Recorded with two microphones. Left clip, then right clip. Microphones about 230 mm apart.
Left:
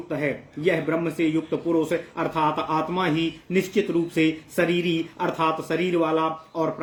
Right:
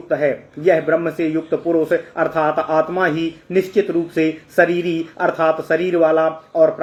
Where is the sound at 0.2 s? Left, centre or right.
Centre.